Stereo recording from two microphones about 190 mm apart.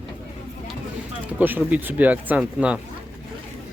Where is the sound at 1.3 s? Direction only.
10° right (ahead or behind).